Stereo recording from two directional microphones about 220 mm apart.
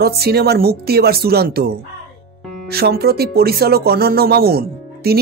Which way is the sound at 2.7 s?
45° right (ahead or behind).